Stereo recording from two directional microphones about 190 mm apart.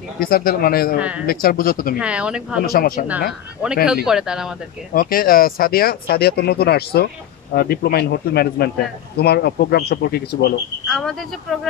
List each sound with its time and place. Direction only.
0.2 s a man's voice: 50° left (ahead or behind)
0.9 s a man's voice: 5° right (ahead or behind)
1.2 s a man's voice: 50° left (ahead or behind)
2.0 s speech: 5° right (ahead or behind)
2.6 s a man's voice: 50° left (ahead or behind)
3.1 s speech: 5° right (ahead or behind)
4.9 s speech: 50° left (ahead or behind)
10.9 s speech: centre (ahead or behind)